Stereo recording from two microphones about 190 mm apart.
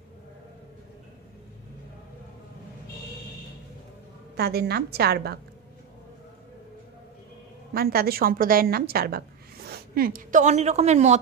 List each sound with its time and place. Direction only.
4.4 s a woman's voice: 55° right (ahead or behind)
7.7 s a woman's voice: 55° right (ahead or behind); by 11.1 s 35° right (ahead or behind)